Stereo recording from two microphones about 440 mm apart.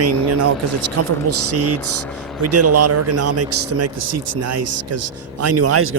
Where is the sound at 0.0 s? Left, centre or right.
Right.